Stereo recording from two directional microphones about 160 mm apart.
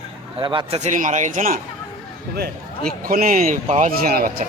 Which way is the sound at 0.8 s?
50° right (ahead or behind).